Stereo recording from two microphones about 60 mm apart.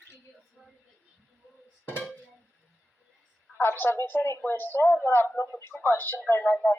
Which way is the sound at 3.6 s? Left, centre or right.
Left.